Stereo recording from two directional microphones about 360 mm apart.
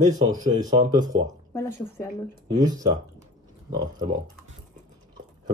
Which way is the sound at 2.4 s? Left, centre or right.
Centre.